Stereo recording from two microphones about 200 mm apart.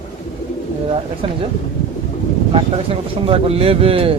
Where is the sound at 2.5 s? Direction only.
30° right (ahead or behind).